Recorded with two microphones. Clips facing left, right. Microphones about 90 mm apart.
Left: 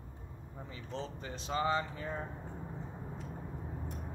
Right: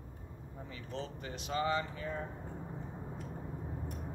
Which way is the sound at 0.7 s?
30° left (ahead or behind).